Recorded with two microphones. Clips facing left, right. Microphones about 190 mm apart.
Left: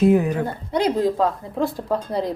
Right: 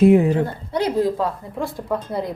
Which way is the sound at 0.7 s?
15° left (ahead or behind).